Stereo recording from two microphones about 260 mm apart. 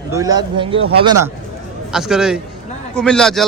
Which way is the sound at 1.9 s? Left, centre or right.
Centre.